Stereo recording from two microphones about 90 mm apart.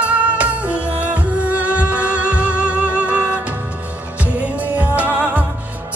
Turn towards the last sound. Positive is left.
turn(degrees=-15)  # may be behind; listen again after turning